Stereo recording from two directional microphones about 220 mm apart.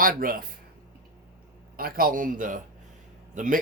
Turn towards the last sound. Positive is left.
turn(degrees=-35)  # may be behind; listen again after turning